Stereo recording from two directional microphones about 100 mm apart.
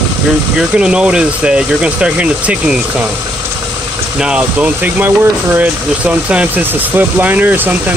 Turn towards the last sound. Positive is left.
turn(degrees=-15)  # may be behind; listen again after turning